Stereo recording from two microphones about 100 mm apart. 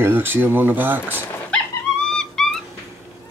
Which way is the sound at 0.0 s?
20° right (ahead or behind).